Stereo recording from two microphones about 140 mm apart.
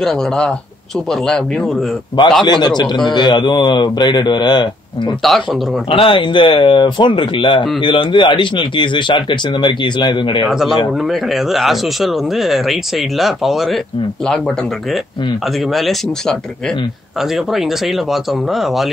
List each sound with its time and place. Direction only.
0.0 s speech: 5° left (ahead or behind)
2.4 s speech: 30° left (ahead or behind)
5.2 s speech: centre (ahead or behind)
5.9 s speech: 40° left (ahead or behind)
10.5 s speech: 5° right (ahead or behind)
15.7 s speech: centre (ahead or behind)